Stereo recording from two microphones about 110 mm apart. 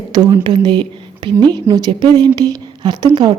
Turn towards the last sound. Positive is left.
turn(degrees=-40)  # may be behind; listen again after turning